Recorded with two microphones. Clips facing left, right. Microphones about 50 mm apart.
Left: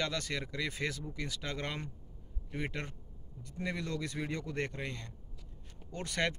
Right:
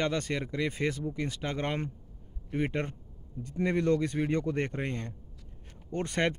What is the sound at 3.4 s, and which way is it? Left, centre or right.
Speech, right.